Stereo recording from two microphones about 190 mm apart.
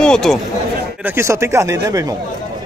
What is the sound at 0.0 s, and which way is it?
Speech, 5° left (ahead or behind).